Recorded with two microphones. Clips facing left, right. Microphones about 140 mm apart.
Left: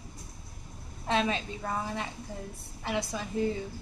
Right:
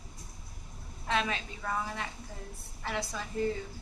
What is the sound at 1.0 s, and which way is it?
A woman's voice, 30° left (ahead or behind).